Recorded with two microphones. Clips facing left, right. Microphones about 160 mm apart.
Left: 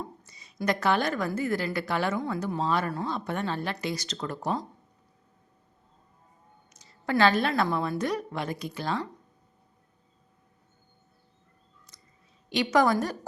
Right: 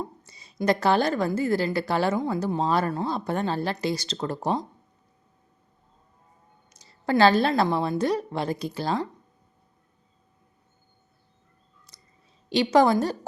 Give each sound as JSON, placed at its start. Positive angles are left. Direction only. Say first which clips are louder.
{"t": 0.3, "sound": "a woman's voice", "louder": "right 5 dB", "side_deg": -30}
{"t": 6.7, "sound": "a woman's voice", "louder": "right 4 dB", "side_deg": -35}
{"t": 12.5, "sound": "a woman's voice", "louder": "right 4 dB", "side_deg": -30}